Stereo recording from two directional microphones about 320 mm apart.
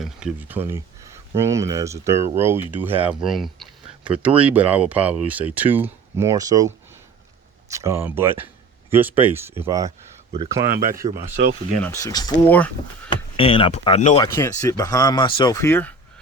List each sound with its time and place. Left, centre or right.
0.0 s speech: centre
7.7 s speech: centre
11.8 s speech: centre
13.3 s speech: centre
14.3 s speech: centre